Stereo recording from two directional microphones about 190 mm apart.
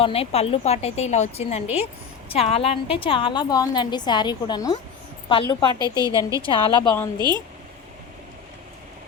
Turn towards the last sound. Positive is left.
turn(degrees=-20)  # may be behind; listen again after turning